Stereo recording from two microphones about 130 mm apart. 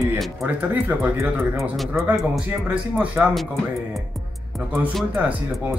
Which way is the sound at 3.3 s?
Centre (ahead or behind).